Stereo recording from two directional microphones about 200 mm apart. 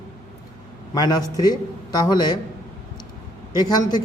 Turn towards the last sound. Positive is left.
turn(degrees=20)  # may be behind; listen again after turning